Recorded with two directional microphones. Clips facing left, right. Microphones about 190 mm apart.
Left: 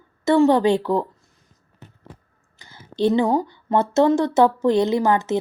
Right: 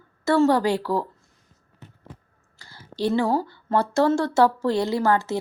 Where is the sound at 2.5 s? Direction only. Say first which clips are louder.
Left 5 dB; 20° left (ahead or behind).